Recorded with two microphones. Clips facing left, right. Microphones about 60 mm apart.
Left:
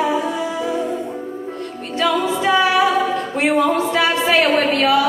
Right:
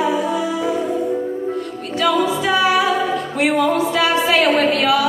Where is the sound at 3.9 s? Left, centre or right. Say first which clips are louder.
Even; left.